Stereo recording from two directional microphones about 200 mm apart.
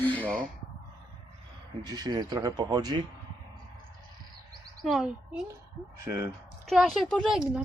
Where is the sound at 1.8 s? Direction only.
20° right (ahead or behind).